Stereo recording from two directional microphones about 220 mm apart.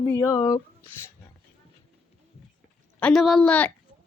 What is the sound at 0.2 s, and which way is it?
Speech, 15° left (ahead or behind).